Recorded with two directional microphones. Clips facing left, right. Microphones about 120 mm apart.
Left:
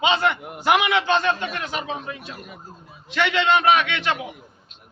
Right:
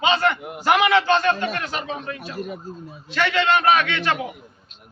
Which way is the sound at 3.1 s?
20° left (ahead or behind).